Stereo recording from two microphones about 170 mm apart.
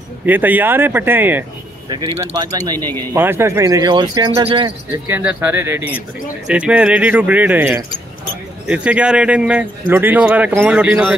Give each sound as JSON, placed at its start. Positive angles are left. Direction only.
{"t": 0.3, "sound": "a man's voice", "side_deg": -10}
{"t": 1.9, "sound": "speech", "side_deg": -25}
{"t": 4.6, "sound": "a man's voice", "side_deg": -15}